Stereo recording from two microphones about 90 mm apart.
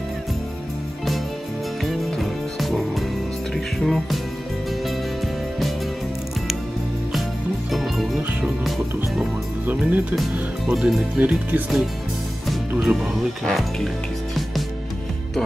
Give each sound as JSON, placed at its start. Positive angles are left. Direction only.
{"t": 1.8, "sound": "music", "side_deg": 0}
{"t": 7.7, "sound": "music", "side_deg": 0}
{"t": 8.2, "sound": "music", "side_deg": -20}
{"t": 8.6, "sound": "music", "side_deg": -5}
{"t": 9.7, "sound": "music", "side_deg": -20}
{"t": 10.7, "sound": "speech", "side_deg": -5}
{"t": 11.1, "sound": "speech", "side_deg": -20}
{"t": 12.4, "sound": "music", "side_deg": -5}
{"t": 13.5, "sound": "speech", "side_deg": 0}